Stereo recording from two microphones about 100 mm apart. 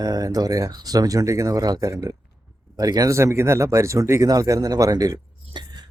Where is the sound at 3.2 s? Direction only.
25° right (ahead or behind); by 5.9 s 45° right (ahead or behind).